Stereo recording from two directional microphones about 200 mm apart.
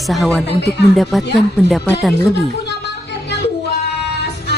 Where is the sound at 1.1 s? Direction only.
Centre (ahead or behind).